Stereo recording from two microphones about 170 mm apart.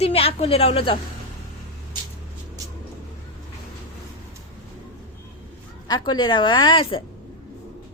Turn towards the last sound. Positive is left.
turn(degrees=30)  # may be behind; listen again after turning